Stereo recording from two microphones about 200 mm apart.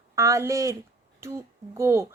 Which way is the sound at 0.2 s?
15° right (ahead or behind).